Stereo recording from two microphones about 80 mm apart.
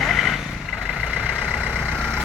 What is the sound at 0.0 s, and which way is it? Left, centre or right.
Vehicle, centre.